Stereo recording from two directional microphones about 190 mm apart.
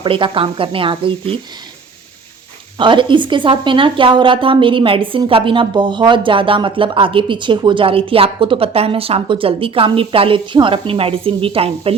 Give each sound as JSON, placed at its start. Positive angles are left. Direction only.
{"t": 0.0, "sound": "a woman's voice", "side_deg": -25}
{"t": 2.7, "sound": "a woman's voice", "side_deg": -25}